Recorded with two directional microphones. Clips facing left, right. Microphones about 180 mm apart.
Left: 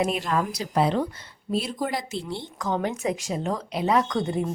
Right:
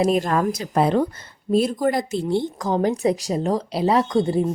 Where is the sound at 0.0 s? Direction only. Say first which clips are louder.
Right 6 dB; 45° right (ahead or behind).